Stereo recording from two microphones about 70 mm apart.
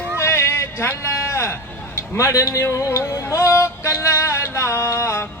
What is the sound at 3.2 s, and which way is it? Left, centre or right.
Music, left.